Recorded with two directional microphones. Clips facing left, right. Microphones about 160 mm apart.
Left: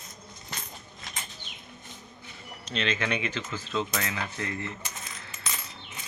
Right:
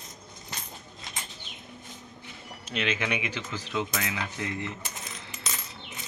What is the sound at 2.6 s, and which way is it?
Speech, 10° right (ahead or behind).